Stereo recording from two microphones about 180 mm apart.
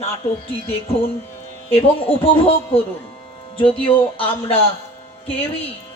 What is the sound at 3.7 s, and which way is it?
Speech, 30° left (ahead or behind).